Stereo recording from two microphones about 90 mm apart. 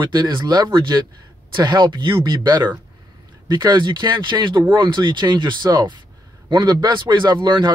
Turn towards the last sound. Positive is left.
turn(degrees=-55)  # may be behind; listen again after turning